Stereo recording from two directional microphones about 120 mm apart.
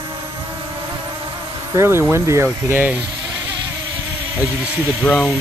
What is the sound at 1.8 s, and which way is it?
Speech, 20° right (ahead or behind).